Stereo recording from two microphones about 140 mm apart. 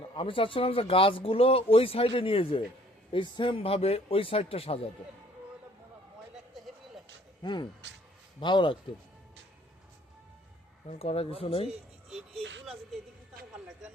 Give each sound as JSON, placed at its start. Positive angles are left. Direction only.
{"t": 0.1, "sound": "a man's voice", "side_deg": 40}
{"t": 7.4, "sound": "speech", "side_deg": 30}
{"t": 10.8, "sound": "a man's voice", "side_deg": 45}
{"t": 12.4, "sound": "speech", "side_deg": 0}